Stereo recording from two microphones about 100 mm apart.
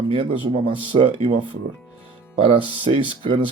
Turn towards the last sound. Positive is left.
turn(degrees=-60)  # may be behind; listen again after turning